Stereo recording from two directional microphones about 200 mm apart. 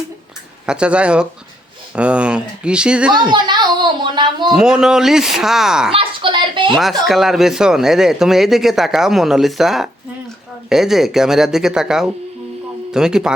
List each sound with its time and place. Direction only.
0.6 s speech: 5° right (ahead or behind)
3.2 s speech: 20° right (ahead or behind)
4.5 s speech: 5° right (ahead or behind)
5.9 s a sound: 25° right (ahead or behind)
7.1 s speech: centre (ahead or behind)